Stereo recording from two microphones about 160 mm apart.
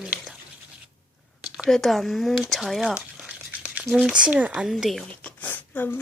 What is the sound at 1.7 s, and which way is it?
Speech, centre (ahead or behind).